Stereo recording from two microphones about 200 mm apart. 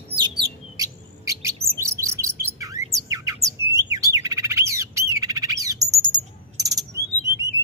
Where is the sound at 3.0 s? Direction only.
15° right (ahead or behind).